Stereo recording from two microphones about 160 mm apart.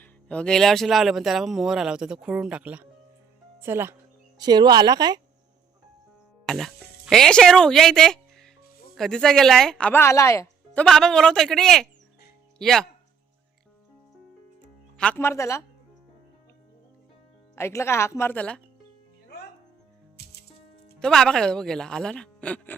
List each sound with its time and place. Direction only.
0.0 s a man's voice: 5° left (ahead or behind); by 3.9 s 15° right (ahead or behind)
4.4 s speech: 25° right (ahead or behind)
6.4 s a man's voice: centre (ahead or behind); by 10.8 s 15° left (ahead or behind)
10.8 s a man's voice: 5° left (ahead or behind)
14.9 s speech: 10° left (ahead or behind)
17.5 s speech: 15° left (ahead or behind)
20.2 s music: 90° left
21.0 s a man's voice: 5° left (ahead or behind)